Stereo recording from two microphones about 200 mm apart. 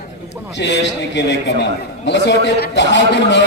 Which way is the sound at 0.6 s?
60° left (ahead or behind).